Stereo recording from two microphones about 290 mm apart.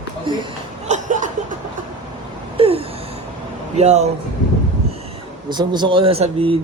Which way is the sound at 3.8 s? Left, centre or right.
Right.